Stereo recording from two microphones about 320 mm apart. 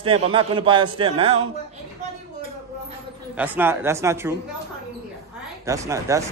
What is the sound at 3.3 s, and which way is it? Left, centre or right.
Speech, centre.